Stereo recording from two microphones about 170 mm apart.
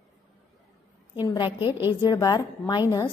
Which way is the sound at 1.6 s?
15° right (ahead or behind).